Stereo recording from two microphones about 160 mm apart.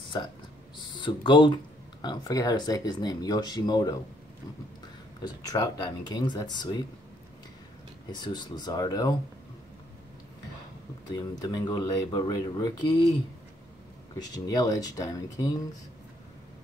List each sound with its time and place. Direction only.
0.7 s speech: 30° left (ahead or behind)
5.2 s speech: 25° left (ahead or behind)
8.1 s speech: 25° left (ahead or behind)
11.1 s speech: 25° left (ahead or behind)
14.1 s speech: 25° left (ahead or behind)